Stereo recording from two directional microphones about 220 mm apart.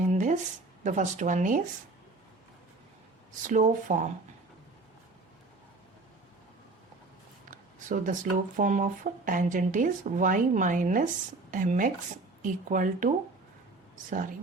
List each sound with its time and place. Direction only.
0.1 s a sound: 35° right (ahead or behind)
0.9 s speech: 35° right (ahead or behind)
3.4 s speech: 35° right (ahead or behind)
7.5 s speech: 35° right (ahead or behind)